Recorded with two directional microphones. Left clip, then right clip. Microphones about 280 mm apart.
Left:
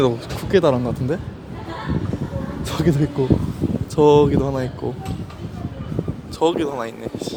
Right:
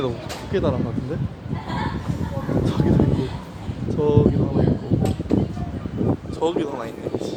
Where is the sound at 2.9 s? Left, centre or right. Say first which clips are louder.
Left 1 dB; left.